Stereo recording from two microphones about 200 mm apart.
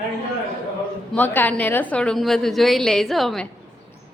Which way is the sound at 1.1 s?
10° left (ahead or behind).